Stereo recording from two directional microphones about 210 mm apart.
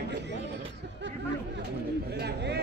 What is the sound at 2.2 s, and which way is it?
Speech, 55° right (ahead or behind).